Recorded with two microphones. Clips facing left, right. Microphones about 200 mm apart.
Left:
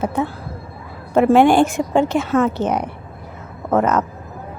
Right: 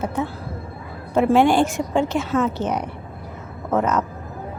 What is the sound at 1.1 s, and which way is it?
A woman's voice, 55° left (ahead or behind).